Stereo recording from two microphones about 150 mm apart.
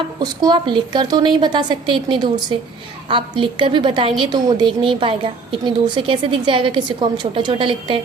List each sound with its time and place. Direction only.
0.4 s a woman's voice: 30° right (ahead or behind)